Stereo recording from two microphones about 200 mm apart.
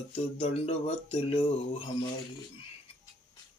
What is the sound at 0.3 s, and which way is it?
Mantra, 30° left (ahead or behind).